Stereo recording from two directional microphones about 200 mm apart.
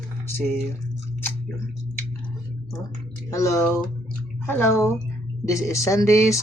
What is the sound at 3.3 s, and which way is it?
Speech, 15° left (ahead or behind).